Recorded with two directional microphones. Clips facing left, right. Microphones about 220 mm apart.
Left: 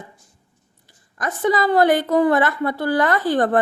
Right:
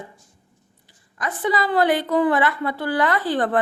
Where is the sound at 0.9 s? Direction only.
45° left (ahead or behind).